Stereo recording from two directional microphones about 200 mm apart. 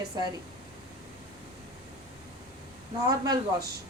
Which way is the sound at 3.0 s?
20° right (ahead or behind).